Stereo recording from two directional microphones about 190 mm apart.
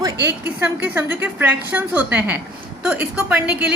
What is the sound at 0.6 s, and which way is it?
A woman's voice, 10° right (ahead or behind).